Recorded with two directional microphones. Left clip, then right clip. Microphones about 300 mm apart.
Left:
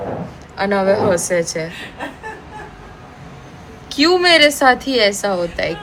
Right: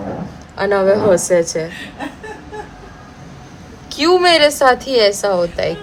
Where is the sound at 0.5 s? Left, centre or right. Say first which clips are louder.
Right 2 dB; centre.